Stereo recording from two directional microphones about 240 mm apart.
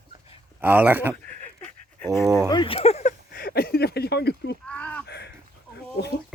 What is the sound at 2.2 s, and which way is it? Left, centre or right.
Speech, centre.